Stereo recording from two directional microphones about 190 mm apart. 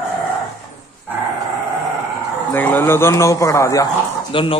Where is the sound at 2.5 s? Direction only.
10° left (ahead or behind).